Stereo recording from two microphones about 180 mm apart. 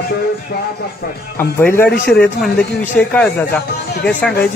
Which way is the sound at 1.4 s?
10° left (ahead or behind).